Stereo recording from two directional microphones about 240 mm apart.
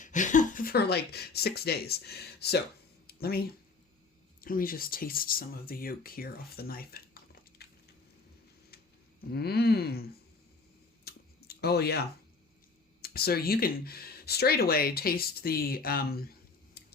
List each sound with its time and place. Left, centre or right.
0.0 s speech: left
7.6 s a sound: left
9.3 s speech: left
11.0 s clicking: left
13.0 s speech: left